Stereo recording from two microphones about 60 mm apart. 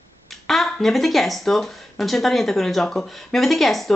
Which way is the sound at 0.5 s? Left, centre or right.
Centre.